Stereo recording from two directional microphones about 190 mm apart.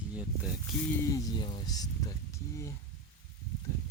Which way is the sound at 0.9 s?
20° left (ahead or behind).